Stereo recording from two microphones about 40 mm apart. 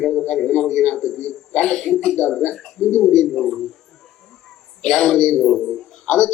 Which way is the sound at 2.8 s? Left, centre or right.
Left.